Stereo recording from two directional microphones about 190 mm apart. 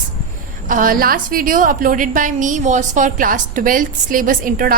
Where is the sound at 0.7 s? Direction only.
45° right (ahead or behind).